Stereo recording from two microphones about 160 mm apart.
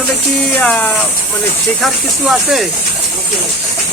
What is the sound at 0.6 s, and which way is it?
Speech, 10° left (ahead or behind).